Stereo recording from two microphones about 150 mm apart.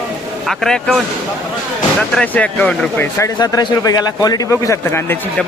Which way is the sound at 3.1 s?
20° left (ahead or behind).